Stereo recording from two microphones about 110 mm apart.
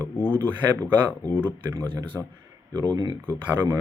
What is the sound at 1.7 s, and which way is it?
Speech, 30° right (ahead or behind).